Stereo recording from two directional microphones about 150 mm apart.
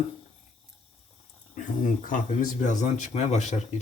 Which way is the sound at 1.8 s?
65° left (ahead or behind).